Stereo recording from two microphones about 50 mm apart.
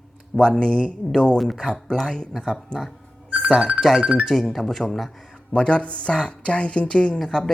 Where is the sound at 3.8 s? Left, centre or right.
Centre.